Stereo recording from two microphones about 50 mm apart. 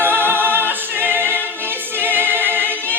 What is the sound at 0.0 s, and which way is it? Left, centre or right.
Music, right.